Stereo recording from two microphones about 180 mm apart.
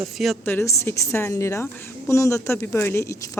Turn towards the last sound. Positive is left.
turn(degrees=15)  # may be behind; listen again after turning